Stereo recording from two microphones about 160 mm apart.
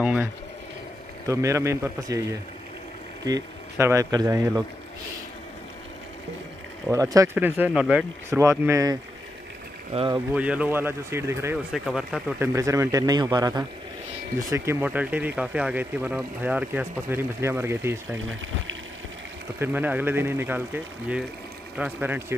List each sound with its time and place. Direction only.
0.0 s speech: 5° right (ahead or behind)
1.2 s speech: 20° right (ahead or behind)
3.3 s speech: 20° right (ahead or behind)
6.9 s speech: 20° right (ahead or behind)
8.3 s speech: 15° right (ahead or behind)
9.9 s speech: 30° right (ahead or behind)
10.3 s speech: 10° right (ahead or behind)
11.5 s speech: centre (ahead or behind)
12.4 s speech: 20° right (ahead or behind)
19.6 s speech: 10° right (ahead or behind)